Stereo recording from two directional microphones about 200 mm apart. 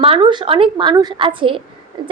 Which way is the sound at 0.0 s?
25° right (ahead or behind).